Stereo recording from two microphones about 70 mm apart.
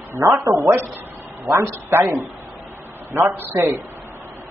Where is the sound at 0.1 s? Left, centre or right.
Right.